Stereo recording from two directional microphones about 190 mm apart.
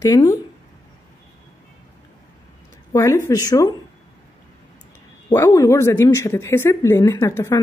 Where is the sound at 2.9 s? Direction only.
15° left (ahead or behind).